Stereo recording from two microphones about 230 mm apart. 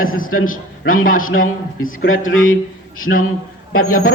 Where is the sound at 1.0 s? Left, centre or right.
Left.